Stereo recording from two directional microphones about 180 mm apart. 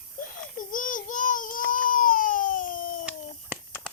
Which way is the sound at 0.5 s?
50° left (ahead or behind).